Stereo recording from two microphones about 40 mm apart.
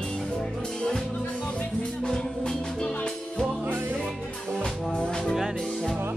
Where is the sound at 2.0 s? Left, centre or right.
Centre.